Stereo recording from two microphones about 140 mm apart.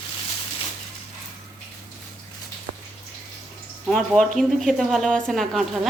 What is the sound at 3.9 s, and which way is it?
A woman's voice, centre (ahead or behind).